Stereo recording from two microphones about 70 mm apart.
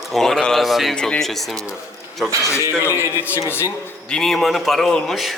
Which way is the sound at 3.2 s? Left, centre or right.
Left.